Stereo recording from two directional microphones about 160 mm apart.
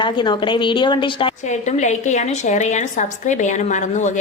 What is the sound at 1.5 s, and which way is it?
A woman's voice, 50° left (ahead or behind).